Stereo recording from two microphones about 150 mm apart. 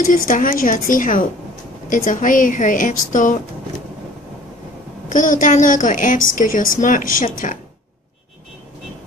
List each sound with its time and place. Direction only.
0.1 s a woman's voice: 65° left (ahead or behind)
5.1 s a woman's voice: 60° left (ahead or behind)